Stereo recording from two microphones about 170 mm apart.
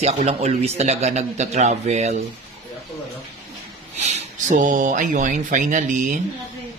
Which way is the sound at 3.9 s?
40° right (ahead or behind).